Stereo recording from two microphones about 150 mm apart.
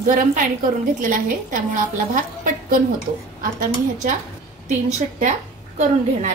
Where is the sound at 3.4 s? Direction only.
60° right (ahead or behind).